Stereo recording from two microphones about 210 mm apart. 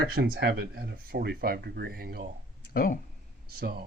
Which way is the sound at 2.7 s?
45° left (ahead or behind).